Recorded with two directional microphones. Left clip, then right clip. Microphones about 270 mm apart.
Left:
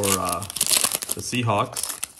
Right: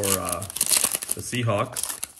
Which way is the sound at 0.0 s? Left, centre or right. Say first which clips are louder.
Left 3 dB; centre.